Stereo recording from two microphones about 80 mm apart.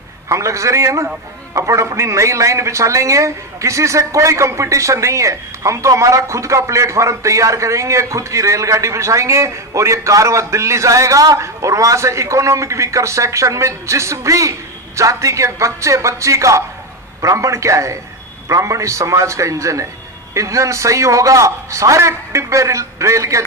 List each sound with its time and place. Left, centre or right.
0.3 s a man's voice: right